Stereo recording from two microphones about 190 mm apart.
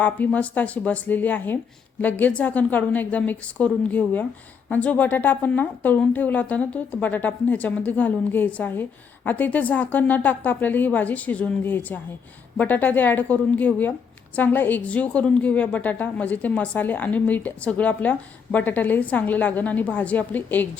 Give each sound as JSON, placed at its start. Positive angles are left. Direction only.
{"t": 0.0, "sound": "a woman's voice", "side_deg": 10}